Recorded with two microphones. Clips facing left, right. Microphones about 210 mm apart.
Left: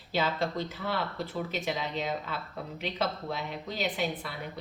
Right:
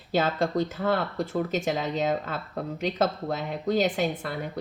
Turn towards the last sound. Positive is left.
turn(degrees=-45)  # may be behind; listen again after turning